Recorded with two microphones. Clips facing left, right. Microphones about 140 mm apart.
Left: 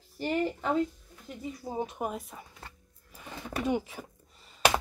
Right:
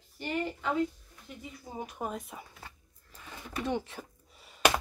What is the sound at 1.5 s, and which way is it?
Speech, 30° left (ahead or behind).